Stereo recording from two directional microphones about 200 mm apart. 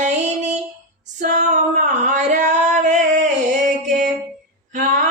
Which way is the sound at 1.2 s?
40° right (ahead or behind).